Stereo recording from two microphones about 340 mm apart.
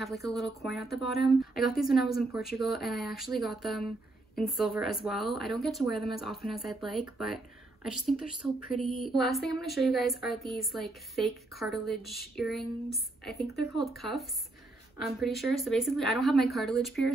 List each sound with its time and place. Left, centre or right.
0.0 s a woman's voice: centre